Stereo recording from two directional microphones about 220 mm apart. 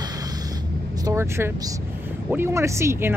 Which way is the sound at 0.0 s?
15° right (ahead or behind).